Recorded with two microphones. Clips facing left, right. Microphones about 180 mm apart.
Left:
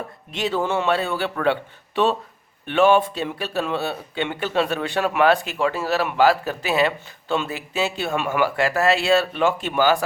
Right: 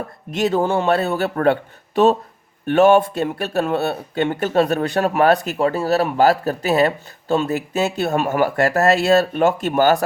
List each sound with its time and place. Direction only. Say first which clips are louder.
0.3 s speech: right 5 dB; 45° right (ahead or behind)
2.6 s speech: right 4 dB; 45° right (ahead or behind)